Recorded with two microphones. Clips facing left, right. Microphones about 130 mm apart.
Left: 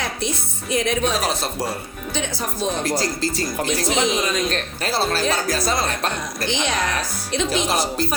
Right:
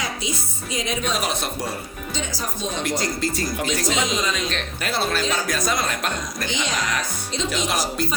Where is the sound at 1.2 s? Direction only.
35° left (ahead or behind).